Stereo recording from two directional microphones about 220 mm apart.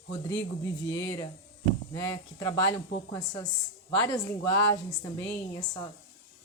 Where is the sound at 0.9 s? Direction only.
15° left (ahead or behind).